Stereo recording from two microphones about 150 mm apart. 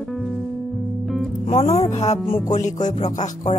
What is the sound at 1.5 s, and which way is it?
Music, 40° left (ahead or behind).